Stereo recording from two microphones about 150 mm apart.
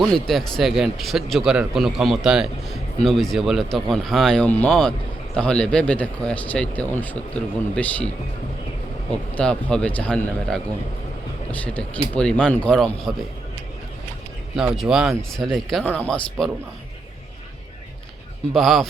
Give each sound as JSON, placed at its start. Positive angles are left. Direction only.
{"t": 0.0, "sound": "speech", "side_deg": 0}
{"t": 9.3, "sound": "speech", "side_deg": 5}
{"t": 14.5, "sound": "speech", "side_deg": -5}
{"t": 18.5, "sound": "speech", "side_deg": 0}